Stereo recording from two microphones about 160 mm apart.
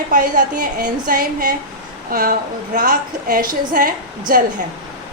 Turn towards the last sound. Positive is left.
turn(degrees=-65)  # may be behind; listen again after turning